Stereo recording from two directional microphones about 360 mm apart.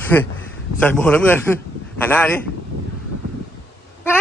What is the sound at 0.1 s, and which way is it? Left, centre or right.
Speech, centre.